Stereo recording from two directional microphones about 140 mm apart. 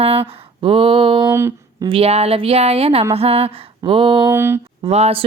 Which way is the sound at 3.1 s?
45° right (ahead or behind).